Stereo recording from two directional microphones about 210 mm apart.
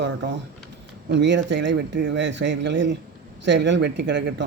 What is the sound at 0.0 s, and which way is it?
A man's voice, 55° right (ahead or behind).